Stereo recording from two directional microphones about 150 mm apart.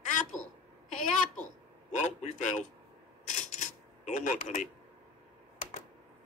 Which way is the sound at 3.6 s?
55° left (ahead or behind).